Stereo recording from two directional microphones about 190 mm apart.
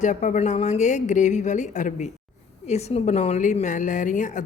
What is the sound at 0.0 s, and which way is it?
A woman's voice, 40° left (ahead or behind).